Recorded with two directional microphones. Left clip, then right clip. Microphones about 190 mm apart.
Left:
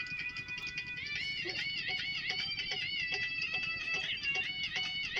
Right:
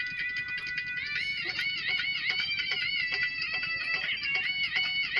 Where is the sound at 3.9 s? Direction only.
35° right (ahead or behind).